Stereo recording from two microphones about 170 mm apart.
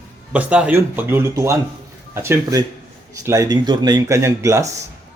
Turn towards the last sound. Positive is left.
turn(degrees=-15)  # may be behind; listen again after turning